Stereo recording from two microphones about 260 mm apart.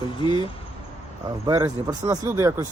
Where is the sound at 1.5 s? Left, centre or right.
Centre.